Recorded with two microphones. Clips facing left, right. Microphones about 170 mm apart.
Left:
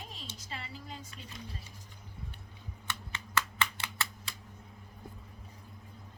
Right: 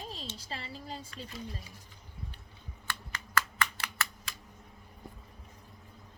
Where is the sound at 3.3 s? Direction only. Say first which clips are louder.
Right 1 dB; 25° left (ahead or behind).